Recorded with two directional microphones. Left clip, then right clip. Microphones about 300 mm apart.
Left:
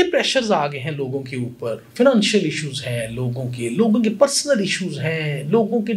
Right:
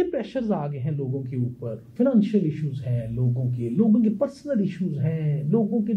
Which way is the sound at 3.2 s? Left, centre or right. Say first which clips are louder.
Left 4 dB; left.